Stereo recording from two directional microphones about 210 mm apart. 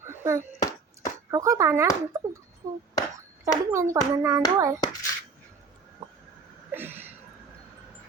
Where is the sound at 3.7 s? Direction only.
15° right (ahead or behind).